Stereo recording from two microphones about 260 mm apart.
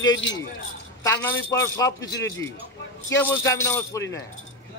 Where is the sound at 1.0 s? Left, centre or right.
Centre.